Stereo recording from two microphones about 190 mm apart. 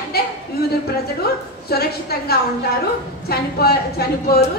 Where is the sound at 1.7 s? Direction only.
55° left (ahead or behind).